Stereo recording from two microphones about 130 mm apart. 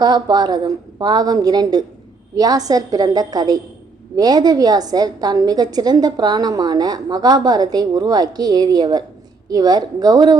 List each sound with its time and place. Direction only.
0.0 s a woman's voice: 35° right (ahead or behind)